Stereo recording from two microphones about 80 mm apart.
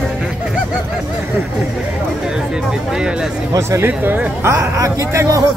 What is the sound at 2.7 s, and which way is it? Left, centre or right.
Speech, centre.